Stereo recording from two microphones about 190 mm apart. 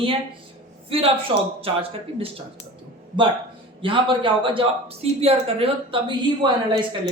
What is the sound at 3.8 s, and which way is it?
A woman's voice, 25° right (ahead or behind).